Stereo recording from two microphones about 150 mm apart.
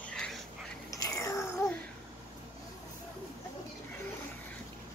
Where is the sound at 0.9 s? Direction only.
20° left (ahead or behind).